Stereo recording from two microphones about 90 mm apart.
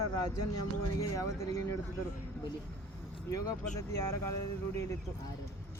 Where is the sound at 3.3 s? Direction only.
35° left (ahead or behind).